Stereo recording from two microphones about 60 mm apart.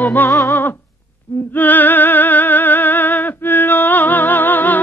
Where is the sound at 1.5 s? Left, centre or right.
Left.